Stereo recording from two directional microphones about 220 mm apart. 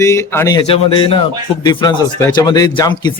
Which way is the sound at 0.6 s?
25° left (ahead or behind).